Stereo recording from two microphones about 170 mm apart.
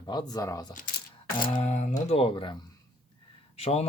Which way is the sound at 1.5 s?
40° left (ahead or behind).